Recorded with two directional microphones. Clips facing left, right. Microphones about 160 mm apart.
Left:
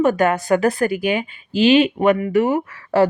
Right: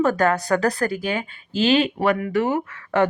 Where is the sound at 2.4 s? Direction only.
30° left (ahead or behind).